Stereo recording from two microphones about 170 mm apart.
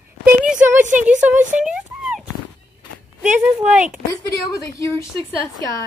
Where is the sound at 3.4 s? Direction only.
5° right (ahead or behind).